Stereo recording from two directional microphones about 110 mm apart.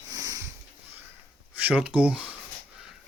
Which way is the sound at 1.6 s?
10° right (ahead or behind).